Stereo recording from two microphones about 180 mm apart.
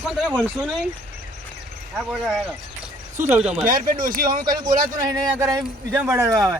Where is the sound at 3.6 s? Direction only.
50° right (ahead or behind).